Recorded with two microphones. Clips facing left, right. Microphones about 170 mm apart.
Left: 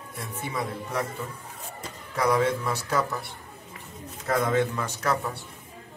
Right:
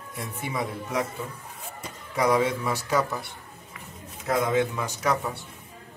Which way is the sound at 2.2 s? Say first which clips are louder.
Even; centre (ahead or behind).